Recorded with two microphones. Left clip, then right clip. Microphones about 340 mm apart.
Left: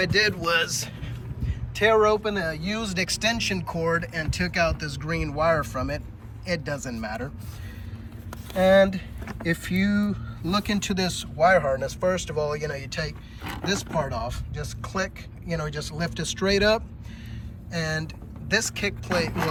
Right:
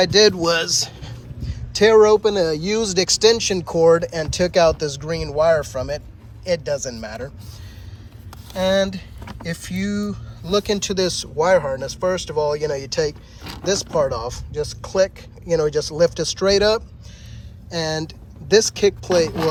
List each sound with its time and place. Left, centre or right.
0.0 s speech: centre
8.8 s speech: centre